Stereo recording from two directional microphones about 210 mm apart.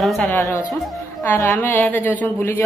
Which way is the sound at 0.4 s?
15° left (ahead or behind).